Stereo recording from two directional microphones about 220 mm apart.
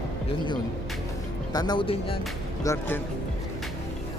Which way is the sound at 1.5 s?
20° left (ahead or behind).